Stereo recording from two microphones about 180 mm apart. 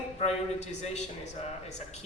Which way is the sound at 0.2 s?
40° left (ahead or behind).